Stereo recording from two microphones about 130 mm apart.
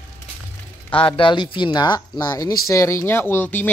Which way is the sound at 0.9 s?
40° left (ahead or behind).